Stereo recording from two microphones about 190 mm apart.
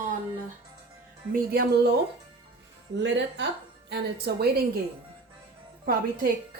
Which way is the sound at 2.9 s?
70° right (ahead or behind).